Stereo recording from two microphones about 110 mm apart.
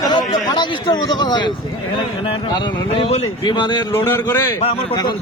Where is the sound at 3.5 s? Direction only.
45° left (ahead or behind).